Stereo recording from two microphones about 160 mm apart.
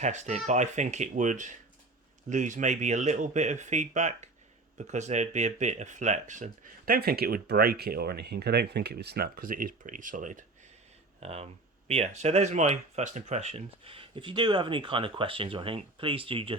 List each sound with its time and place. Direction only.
0.0 s speech: 45° right (ahead or behind)
11.2 s speech: 40° right (ahead or behind)